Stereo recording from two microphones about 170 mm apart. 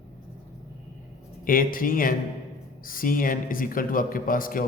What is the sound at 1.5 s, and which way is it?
A man's voice, 55° left (ahead or behind).